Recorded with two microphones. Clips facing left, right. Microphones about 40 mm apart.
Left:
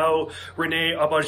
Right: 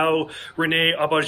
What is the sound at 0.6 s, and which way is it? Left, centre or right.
Speech, right.